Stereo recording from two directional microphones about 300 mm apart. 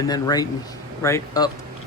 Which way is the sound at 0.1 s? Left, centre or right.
Centre.